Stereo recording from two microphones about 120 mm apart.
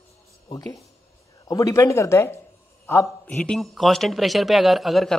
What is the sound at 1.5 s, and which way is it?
Speech, 30° left (ahead or behind).